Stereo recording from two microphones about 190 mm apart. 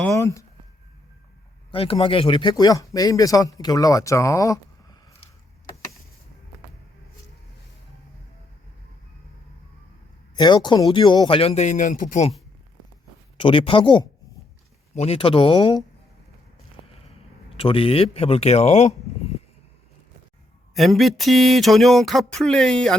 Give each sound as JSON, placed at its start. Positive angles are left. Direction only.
{"t": 0.2, "sound": "speech", "side_deg": 15}
{"t": 1.7, "sound": "a man's voice", "side_deg": 30}
{"t": 10.3, "sound": "a man's voice", "side_deg": 25}
{"t": 13.3, "sound": "a man's voice", "side_deg": 25}
{"t": 17.6, "sound": "speech", "side_deg": 30}
{"t": 20.7, "sound": "a sound", "side_deg": 0}